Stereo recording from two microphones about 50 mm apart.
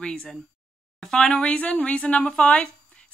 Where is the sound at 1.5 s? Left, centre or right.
Left.